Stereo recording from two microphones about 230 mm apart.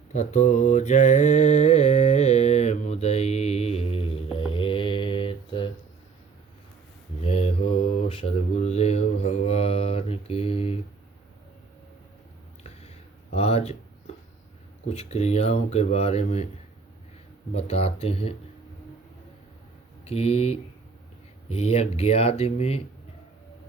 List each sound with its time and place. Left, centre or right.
0.1 s mantra: left
7.3 s mantra: left
13.3 s a sound: left
14.8 s speech: left
17.5 s speech: left
20.1 s speech: left